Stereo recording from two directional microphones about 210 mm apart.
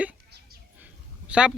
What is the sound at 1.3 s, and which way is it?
Speech, 5° right (ahead or behind).